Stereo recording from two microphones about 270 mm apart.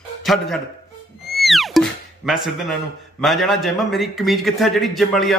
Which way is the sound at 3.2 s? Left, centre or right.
Centre.